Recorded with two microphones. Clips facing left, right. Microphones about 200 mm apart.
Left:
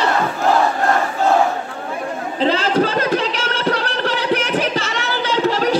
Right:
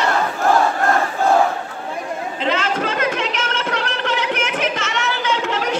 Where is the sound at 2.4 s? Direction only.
35° left (ahead or behind).